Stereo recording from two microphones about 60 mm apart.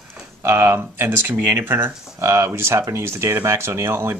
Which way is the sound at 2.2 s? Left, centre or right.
Right.